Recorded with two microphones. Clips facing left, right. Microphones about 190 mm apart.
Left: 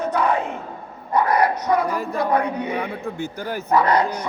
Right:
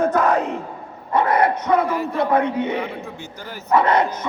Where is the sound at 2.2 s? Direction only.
25° right (ahead or behind).